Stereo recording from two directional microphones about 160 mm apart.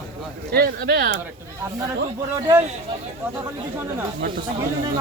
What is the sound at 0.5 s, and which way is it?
Speech, 80° right.